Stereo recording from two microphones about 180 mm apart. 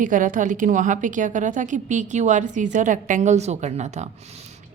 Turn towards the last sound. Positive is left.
turn(degrees=-40)  # may be behind; listen again after turning